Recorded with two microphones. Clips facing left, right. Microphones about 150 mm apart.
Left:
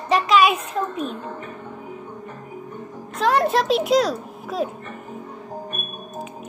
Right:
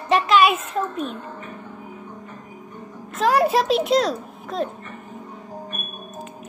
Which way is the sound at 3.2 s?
5° right (ahead or behind).